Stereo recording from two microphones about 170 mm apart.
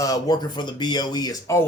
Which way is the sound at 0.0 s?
20° left (ahead or behind).